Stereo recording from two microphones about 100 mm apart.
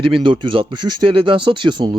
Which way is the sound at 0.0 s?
60° right (ahead or behind).